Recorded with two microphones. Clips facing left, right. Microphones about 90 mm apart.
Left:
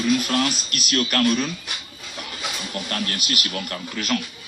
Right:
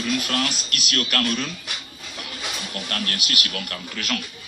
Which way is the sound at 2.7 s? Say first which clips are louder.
Left 2 dB; 25° left (ahead or behind).